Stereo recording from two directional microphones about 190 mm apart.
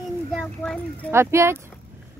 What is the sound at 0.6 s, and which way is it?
Speech, 5° left (ahead or behind).